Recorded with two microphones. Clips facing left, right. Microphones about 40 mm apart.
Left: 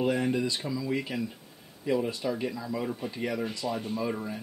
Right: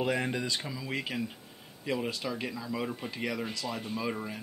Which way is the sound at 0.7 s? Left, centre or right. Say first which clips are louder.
Left 7 dB; right.